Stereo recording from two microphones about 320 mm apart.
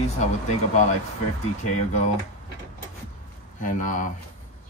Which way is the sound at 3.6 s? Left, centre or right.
Left.